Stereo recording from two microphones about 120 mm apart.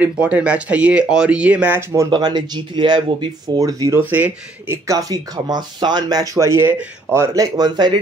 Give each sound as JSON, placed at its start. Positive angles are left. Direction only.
{"t": 0.0, "sound": "speech", "side_deg": -10}
{"t": 1.8, "sound": "speech", "side_deg": -20}
{"t": 2.0, "sound": "speech", "side_deg": -40}
{"t": 3.5, "sound": "speech", "side_deg": -30}
{"t": 4.0, "sound": "speech", "side_deg": -15}
{"t": 4.8, "sound": "speech", "side_deg": -30}
{"t": 7.5, "sound": "speech", "side_deg": -35}